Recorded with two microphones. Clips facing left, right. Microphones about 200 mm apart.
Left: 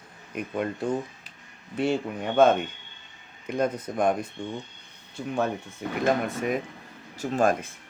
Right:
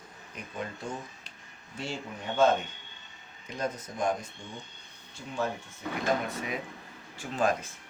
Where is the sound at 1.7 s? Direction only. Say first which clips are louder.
Left 11 dB; 60° left (ahead or behind).